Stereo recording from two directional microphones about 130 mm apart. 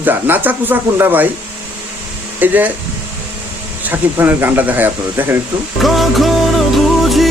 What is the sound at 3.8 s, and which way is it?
Speech, 15° right (ahead or behind).